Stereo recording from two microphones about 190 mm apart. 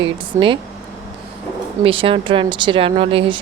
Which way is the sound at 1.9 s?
30° right (ahead or behind).